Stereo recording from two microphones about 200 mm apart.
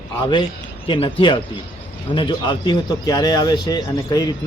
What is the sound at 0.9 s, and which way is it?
A man's voice, 25° left (ahead or behind).